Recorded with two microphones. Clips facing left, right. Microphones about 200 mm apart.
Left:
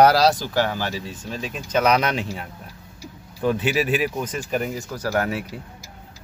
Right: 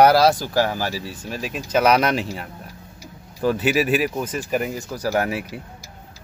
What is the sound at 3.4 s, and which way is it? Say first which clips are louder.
Speech: right 2 dB; 5° right (ahead or behind).